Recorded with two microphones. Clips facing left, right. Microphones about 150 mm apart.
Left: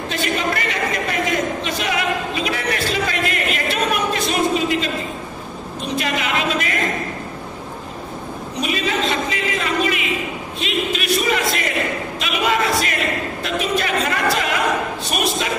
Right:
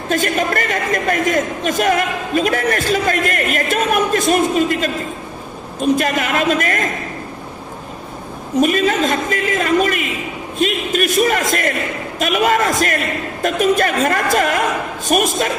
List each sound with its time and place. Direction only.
0.1 s a man's voice: 45° right (ahead or behind)
8.5 s a man's voice: 45° right (ahead or behind)
12.2 s a sound: 45° right (ahead or behind)